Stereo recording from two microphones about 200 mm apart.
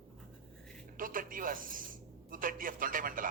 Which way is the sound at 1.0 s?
45° right (ahead or behind).